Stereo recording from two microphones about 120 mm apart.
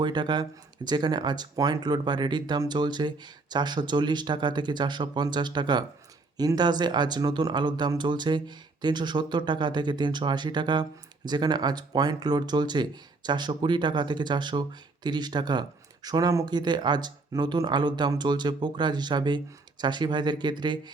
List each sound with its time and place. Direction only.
0.0 s speech: 40° right (ahead or behind)